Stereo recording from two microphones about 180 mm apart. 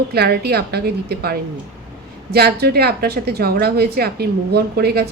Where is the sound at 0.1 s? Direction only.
65° right (ahead or behind).